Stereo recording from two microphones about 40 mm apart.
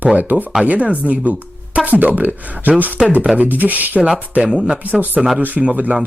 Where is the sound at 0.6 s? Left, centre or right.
Right.